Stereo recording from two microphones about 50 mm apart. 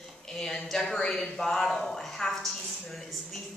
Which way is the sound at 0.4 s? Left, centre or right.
Centre.